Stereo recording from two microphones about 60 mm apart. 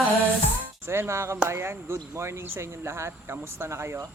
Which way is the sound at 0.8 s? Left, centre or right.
Right.